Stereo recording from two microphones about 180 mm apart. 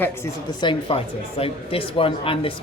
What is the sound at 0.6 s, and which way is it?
Speech, 25° left (ahead or behind).